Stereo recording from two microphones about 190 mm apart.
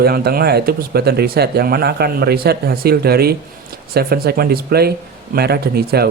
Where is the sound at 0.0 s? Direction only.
55° right (ahead or behind).